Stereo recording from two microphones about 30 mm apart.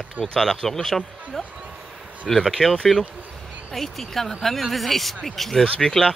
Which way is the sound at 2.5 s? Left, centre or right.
Centre.